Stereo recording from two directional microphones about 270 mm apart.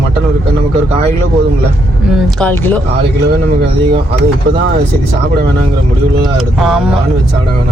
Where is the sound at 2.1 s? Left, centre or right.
Centre.